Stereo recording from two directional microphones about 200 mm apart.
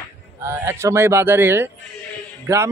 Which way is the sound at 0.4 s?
15° right (ahead or behind).